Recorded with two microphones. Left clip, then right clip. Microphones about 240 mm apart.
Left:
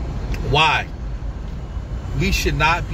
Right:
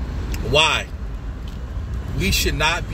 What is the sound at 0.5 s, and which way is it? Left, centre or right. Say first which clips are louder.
Speech: left 1 dB; centre.